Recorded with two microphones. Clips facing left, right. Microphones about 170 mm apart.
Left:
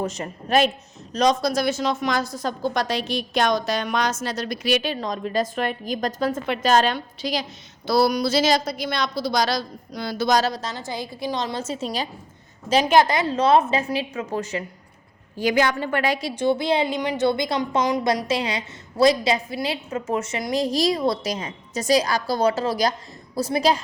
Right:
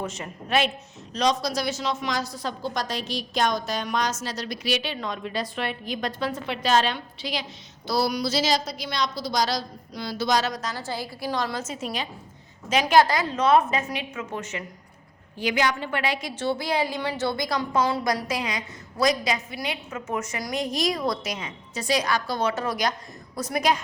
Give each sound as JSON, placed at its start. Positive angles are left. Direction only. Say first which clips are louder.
{"t": 0.0, "sound": "a woman's voice", "louder": "left 5 dB", "side_deg": 40}
{"t": 2.7, "sound": "a woman's voice", "louder": "left 5 dB", "side_deg": 65}
{"t": 7.9, "sound": "a woman's voice", "louder": "left 5 dB", "side_deg": 55}
{"t": 10.5, "sound": "a woman's voice", "louder": "left 1 dB", "side_deg": 25}
{"t": 12.8, "sound": "a woman's voice", "louder": "even", "side_deg": 20}
{"t": 16.3, "sound": "a woman's voice", "louder": "left 7 dB", "side_deg": 15}